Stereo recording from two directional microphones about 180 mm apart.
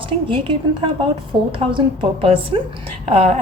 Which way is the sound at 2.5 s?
30° right (ahead or behind).